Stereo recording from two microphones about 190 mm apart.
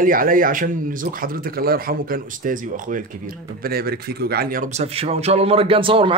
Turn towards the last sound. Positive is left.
turn(degrees=-25)  # may be behind; listen again after turning